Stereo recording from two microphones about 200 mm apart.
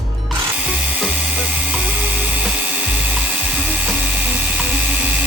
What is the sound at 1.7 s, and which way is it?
Music, 10° right (ahead or behind).